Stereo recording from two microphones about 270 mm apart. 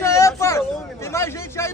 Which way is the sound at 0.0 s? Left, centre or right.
Centre.